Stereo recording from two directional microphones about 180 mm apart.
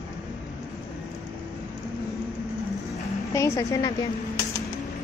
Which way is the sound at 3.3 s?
15° left (ahead or behind).